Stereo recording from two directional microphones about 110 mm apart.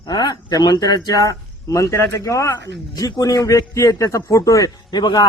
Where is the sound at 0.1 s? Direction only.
40° left (ahead or behind).